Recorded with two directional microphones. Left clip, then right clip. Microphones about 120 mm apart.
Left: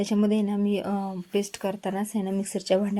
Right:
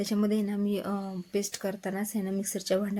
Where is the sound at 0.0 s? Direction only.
30° left (ahead or behind).